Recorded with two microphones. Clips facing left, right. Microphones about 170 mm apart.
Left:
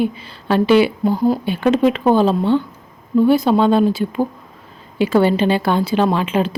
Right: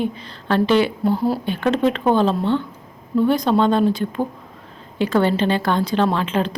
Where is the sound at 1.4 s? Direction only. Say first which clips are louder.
Left 4 dB; 10° left (ahead or behind).